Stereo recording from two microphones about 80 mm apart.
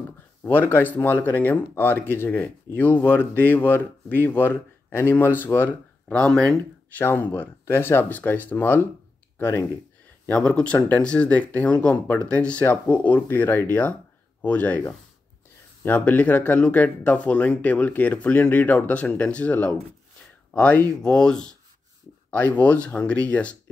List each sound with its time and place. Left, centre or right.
0.4 s speech: left
6.0 s speech: centre
7.0 s speech: left
10.2 s speech: centre